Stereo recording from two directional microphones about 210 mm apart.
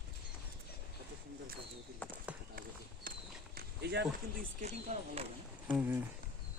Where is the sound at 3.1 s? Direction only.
40° right (ahead or behind).